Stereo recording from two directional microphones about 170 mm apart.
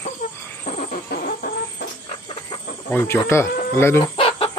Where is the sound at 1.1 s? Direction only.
60° left (ahead or behind).